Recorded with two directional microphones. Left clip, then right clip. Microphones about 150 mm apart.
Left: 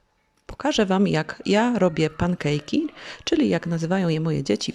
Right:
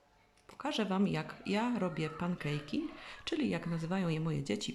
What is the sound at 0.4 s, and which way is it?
Speech, 45° left (ahead or behind).